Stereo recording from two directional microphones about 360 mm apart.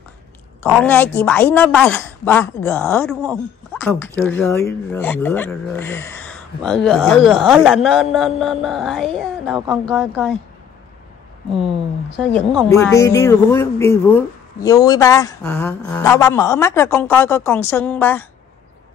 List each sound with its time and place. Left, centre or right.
0.7 s a woman's voice: centre
12.2 s a woman's voice: centre